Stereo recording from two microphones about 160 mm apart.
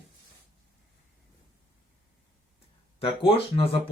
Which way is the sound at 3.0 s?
35° left (ahead or behind).